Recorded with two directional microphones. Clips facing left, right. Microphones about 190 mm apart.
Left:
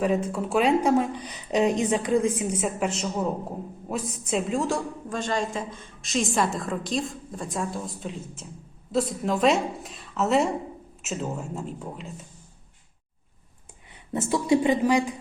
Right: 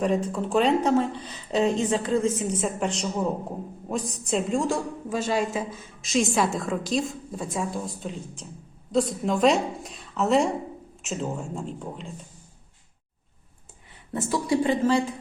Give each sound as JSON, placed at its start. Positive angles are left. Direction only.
{"t": 0.0, "sound": "a woman's voice", "side_deg": 5}
{"t": 14.1, "sound": "a woman's voice", "side_deg": 20}